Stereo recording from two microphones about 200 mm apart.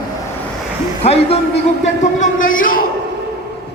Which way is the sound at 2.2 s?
40° left (ahead or behind).